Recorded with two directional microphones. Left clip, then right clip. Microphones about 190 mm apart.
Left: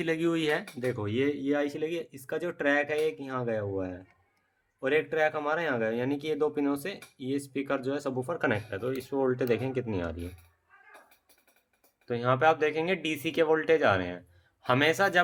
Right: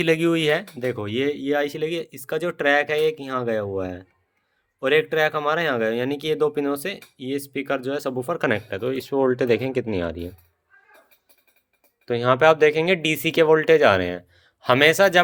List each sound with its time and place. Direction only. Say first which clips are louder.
0.0 s speech: right 9 dB; 40° right (ahead or behind)
12.0 s speech: right 8 dB; 50° right (ahead or behind)